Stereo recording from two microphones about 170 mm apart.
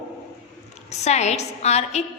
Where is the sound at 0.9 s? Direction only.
40° left (ahead or behind).